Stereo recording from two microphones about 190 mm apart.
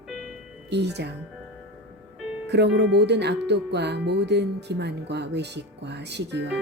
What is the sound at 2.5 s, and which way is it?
Speech, 65° right (ahead or behind).